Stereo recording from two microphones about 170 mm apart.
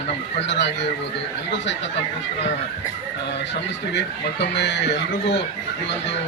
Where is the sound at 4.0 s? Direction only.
90° left.